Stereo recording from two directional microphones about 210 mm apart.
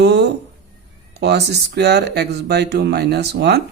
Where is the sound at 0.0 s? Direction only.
50° right (ahead or behind).